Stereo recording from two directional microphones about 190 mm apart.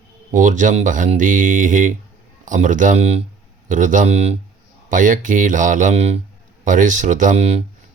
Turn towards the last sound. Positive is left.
turn(degrees=-35)  # may be behind; listen again after turning